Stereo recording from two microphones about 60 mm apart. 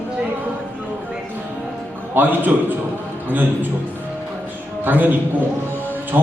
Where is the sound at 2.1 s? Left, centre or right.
Right.